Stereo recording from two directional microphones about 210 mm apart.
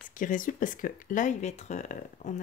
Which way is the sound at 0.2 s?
40° left (ahead or behind).